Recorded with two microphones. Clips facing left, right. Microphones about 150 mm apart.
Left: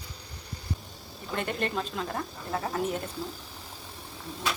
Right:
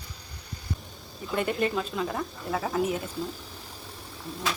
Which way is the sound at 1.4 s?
10° right (ahead or behind).